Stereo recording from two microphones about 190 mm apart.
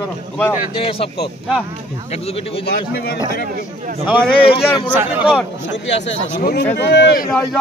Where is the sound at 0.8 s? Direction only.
30° left (ahead or behind).